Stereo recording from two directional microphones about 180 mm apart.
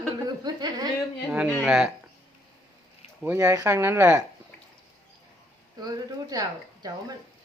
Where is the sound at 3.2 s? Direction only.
10° right (ahead or behind).